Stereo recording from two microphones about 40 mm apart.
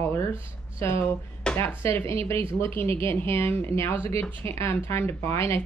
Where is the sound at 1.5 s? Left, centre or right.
Left.